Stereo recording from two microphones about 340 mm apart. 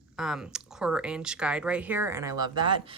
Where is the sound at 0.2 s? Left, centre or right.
Centre.